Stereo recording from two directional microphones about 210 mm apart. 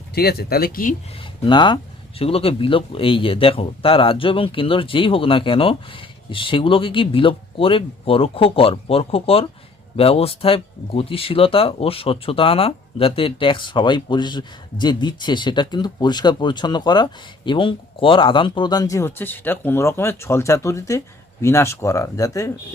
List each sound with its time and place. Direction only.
0.1 s speech: 50° left (ahead or behind)
1.2 s speech: 20° left (ahead or behind)